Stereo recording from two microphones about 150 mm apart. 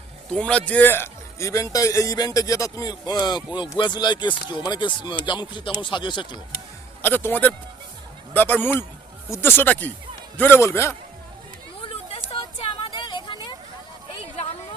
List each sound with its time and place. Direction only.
0.3 s a man's voice: 5° left (ahead or behind); by 6.4 s 30° left (ahead or behind)
7.0 s speech: 15° left (ahead or behind)
11.9 s a sound: 40° left (ahead or behind)